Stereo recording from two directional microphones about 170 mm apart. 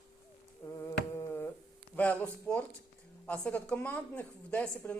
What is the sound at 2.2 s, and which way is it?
A woman's voice, 10° left (ahead or behind).